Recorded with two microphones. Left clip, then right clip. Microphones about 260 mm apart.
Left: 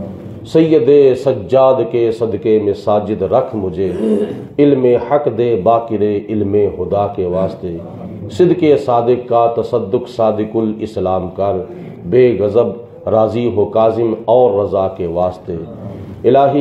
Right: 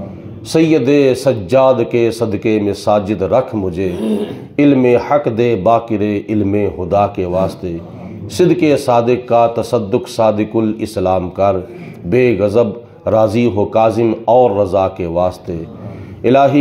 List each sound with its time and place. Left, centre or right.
0.5 s a man's voice: right